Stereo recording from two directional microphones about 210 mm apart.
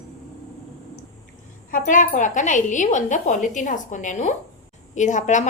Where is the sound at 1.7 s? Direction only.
40° left (ahead or behind).